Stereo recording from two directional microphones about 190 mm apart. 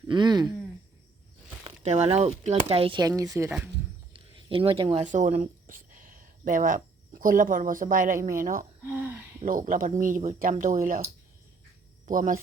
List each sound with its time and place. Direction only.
0.1 s speech: 25° right (ahead or behind)
1.6 s speech: 35° right (ahead or behind); by 3.5 s 15° right (ahead or behind)
4.1 s a sound: 30° right (ahead or behind)
5.0 s speech: 40° right (ahead or behind)
8.9 s a sound: 10° right (ahead or behind)
9.4 s speech: 45° right (ahead or behind)